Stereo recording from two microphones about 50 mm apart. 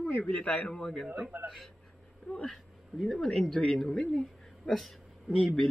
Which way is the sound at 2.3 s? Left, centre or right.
Centre.